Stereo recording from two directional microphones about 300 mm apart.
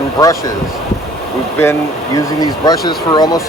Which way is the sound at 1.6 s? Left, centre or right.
Centre.